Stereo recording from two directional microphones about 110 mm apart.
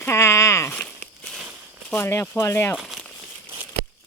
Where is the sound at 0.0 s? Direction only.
25° left (ahead or behind).